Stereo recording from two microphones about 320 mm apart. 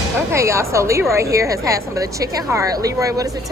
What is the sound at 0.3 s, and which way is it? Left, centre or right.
A woman's voice, centre.